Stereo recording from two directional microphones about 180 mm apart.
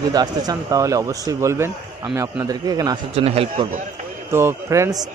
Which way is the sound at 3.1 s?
35° right (ahead or behind).